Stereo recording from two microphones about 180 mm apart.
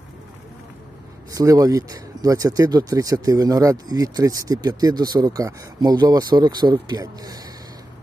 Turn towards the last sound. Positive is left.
turn(degrees=-20)  # may be behind; listen again after turning